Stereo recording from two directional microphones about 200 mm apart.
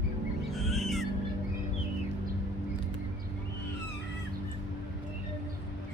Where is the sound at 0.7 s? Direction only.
Centre (ahead or behind).